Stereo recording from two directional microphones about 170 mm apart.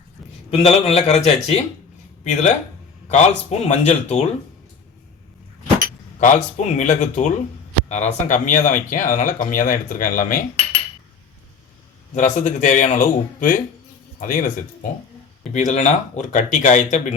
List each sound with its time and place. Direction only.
0.5 s speech: 35° left (ahead or behind)
6.1 s speech: 45° left (ahead or behind)
12.1 s speech: 50° left (ahead or behind)
15.5 s speech: 45° left (ahead or behind)